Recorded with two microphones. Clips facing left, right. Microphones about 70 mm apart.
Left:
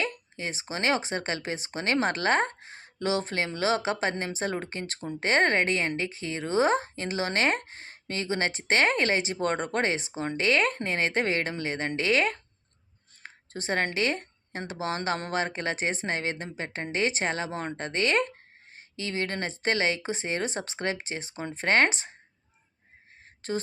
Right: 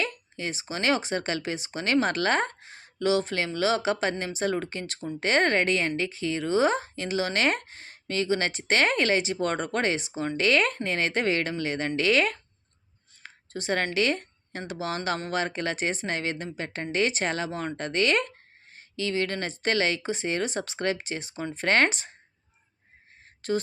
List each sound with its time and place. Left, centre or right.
0.0 s a woman's voice: left
13.2 s a sound: left
14.7 s a woman's voice: left
23.4 s a woman's voice: left